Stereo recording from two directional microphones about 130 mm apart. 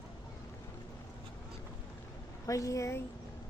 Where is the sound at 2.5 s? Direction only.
25° left (ahead or behind).